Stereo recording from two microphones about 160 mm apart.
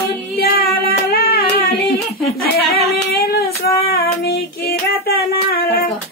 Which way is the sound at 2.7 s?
75° left (ahead or behind).